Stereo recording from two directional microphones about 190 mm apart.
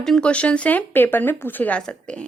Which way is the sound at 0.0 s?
5° left (ahead or behind).